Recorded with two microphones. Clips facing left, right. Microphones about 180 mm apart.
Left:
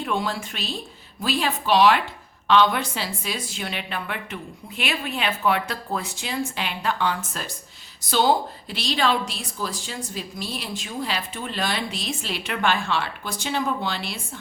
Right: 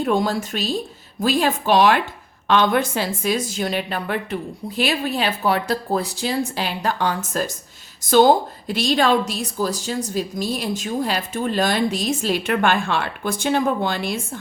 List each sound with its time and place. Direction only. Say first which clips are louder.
0.0 s a woman's voice: right 6 dB; 40° right (ahead or behind)